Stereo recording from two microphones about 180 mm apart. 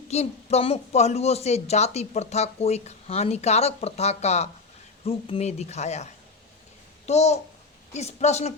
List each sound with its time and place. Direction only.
0.1 s a woman's voice: 35° left (ahead or behind)